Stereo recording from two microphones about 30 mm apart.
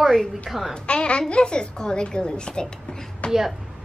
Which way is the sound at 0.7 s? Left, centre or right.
Left.